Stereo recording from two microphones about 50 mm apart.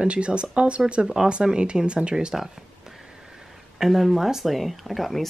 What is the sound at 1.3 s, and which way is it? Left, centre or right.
Speech, centre.